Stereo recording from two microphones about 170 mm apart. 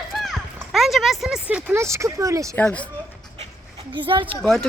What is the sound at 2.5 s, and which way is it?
Speech, 10° left (ahead or behind).